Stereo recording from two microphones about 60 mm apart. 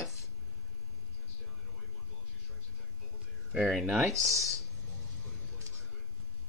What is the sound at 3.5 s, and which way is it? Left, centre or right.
Speech, centre.